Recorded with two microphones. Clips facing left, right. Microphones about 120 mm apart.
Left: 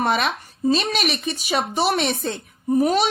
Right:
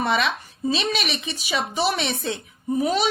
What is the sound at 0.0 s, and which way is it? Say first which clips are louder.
A woman's voice: left 1 dB; 45° left (ahead or behind).